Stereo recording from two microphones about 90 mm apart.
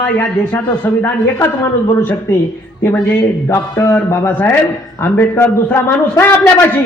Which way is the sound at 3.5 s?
25° left (ahead or behind).